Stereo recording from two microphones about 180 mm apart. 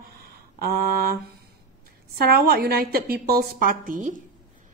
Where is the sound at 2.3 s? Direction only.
60° right (ahead or behind).